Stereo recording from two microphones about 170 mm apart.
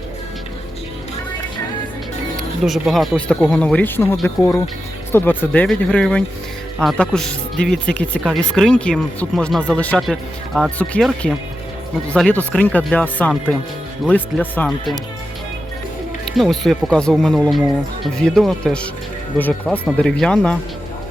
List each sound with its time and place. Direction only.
2.3 s music: centre (ahead or behind)
3.2 s speech: 5° left (ahead or behind)
14.5 s speech: 10° left (ahead or behind)
16.3 s speech: centre (ahead or behind)